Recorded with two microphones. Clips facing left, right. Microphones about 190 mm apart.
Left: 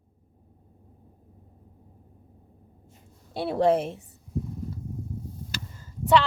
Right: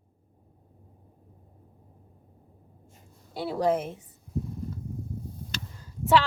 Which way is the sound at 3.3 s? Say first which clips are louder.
Left 4 dB; 25° left (ahead or behind).